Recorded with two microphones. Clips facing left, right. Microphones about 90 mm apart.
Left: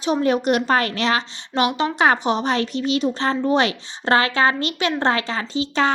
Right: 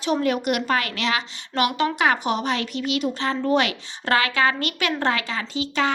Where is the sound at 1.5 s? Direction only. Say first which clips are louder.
Left 2 dB; 20° left (ahead or behind).